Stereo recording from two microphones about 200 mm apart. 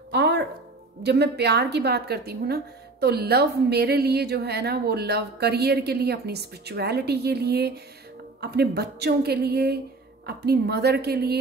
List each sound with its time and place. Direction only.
0.1 s music: 60° right (ahead or behind)
1.0 s a woman's voice: 55° right (ahead or behind)